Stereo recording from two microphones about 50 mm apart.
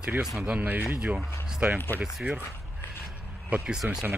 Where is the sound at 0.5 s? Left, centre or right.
Right.